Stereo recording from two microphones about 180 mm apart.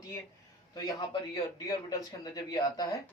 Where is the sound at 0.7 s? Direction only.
25° left (ahead or behind).